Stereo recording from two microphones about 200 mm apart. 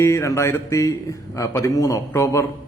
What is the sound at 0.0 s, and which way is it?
A man's voice, 15° left (ahead or behind).